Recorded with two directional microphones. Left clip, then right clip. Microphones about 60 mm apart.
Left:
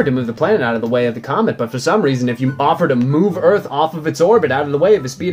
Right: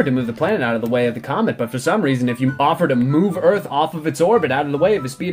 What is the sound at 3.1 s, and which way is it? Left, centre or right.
Speech, left.